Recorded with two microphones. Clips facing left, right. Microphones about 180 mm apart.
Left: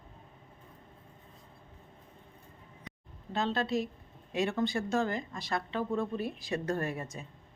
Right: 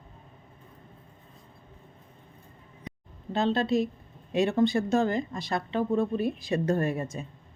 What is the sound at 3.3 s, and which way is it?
Speech, 25° right (ahead or behind).